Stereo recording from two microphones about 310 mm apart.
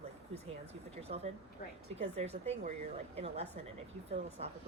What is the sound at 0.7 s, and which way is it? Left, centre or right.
Speech, centre.